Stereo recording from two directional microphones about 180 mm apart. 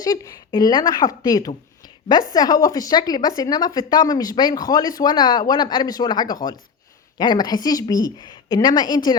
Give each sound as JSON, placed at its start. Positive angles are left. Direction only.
{"t": 0.0, "sound": "speech", "side_deg": 20}